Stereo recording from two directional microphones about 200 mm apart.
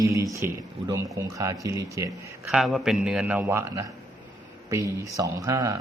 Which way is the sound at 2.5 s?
Centre (ahead or behind).